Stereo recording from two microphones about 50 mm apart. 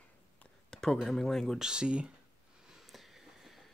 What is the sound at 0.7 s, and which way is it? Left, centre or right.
Speech, centre.